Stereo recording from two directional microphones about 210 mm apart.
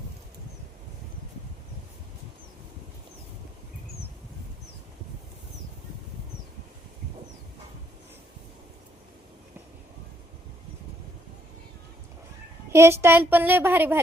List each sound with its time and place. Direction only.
12.7 s a woman's voice: 10° right (ahead or behind)